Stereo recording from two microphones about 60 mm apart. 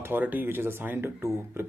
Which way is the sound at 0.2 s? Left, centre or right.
Right.